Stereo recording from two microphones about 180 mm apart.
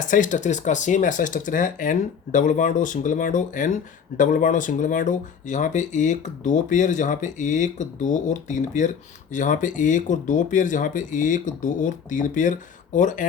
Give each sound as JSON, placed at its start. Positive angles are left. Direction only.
{"t": 0.1, "sound": "speech", "side_deg": 45}